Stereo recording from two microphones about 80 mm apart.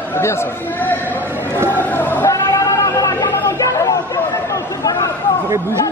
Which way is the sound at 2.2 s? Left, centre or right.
Left.